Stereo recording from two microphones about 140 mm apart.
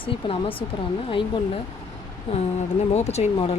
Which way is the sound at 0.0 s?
40° left (ahead or behind).